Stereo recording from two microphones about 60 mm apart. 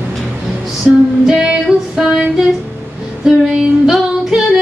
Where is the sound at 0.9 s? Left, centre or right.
Centre.